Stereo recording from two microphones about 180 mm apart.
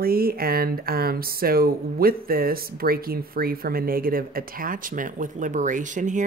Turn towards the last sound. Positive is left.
turn(degrees=-45)  # may be behind; listen again after turning